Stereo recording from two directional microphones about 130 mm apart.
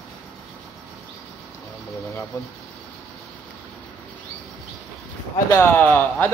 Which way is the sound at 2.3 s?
25° left (ahead or behind).